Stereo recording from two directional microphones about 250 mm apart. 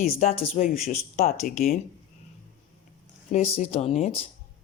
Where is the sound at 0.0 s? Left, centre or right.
Left.